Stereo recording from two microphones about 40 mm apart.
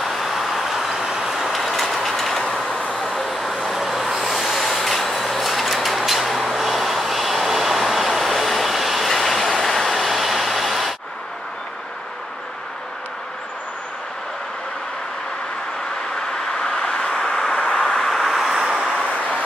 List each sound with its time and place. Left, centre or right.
0.0 s train: centre
3.2 s vehicle: centre
16.2 s vehicle: centre